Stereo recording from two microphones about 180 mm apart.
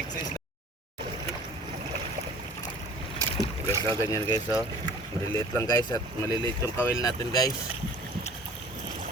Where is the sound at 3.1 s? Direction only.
20° right (ahead or behind).